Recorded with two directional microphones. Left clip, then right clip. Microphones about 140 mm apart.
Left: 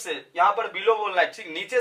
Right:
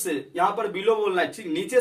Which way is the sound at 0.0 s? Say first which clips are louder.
Left 2 dB; 25° left (ahead or behind).